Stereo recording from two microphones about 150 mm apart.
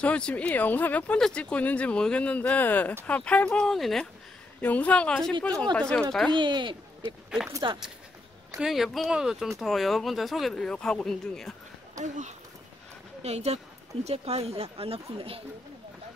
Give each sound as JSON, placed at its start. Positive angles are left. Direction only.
{"t": 0.0, "sound": "speech", "side_deg": 10}
{"t": 6.3, "sound": "speech", "side_deg": -30}
{"t": 8.5, "sound": "speech", "side_deg": 0}
{"t": 12.0, "sound": "speech", "side_deg": -55}